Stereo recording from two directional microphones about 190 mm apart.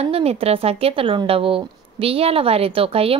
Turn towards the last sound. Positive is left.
turn(degrees=-30)  # may be behind; listen again after turning